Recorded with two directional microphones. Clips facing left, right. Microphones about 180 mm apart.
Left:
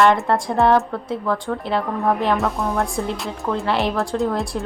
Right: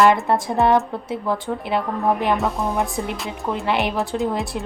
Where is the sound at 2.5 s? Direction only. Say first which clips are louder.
Left 1 dB; centre (ahead or behind).